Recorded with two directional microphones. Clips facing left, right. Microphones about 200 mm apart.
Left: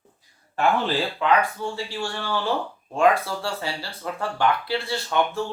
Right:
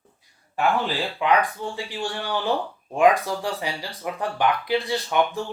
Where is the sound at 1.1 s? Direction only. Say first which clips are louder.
Right 3 dB; 15° right (ahead or behind).